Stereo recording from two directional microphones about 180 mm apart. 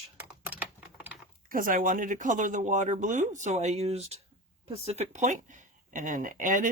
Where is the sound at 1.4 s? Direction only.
50° right (ahead or behind).